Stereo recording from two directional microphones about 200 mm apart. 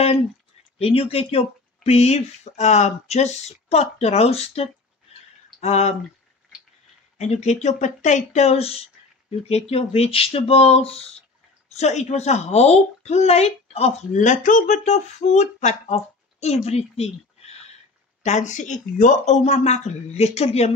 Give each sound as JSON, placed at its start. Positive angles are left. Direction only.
{"t": 0.7, "sound": "speech", "side_deg": 30}
{"t": 7.2, "sound": "speech", "side_deg": 35}
{"t": 18.2, "sound": "speech", "side_deg": 35}